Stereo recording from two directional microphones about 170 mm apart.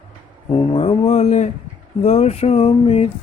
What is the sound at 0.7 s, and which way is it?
Speech, 35° left (ahead or behind).